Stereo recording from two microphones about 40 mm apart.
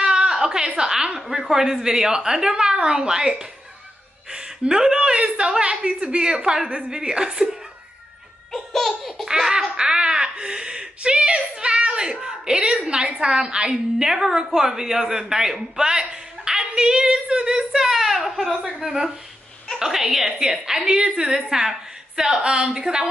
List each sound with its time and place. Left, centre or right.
0.0 s a sound: right
0.7 s a woman's voice: centre
8.5 s laughter: centre
9.3 s baby laughter: centre
9.8 s whimper: right
12.8 s a woman's voice: right